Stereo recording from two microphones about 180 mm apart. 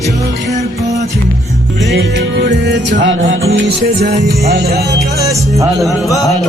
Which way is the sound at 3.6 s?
65° right (ahead or behind).